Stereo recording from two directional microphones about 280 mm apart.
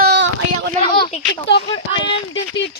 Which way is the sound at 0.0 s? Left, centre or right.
Right.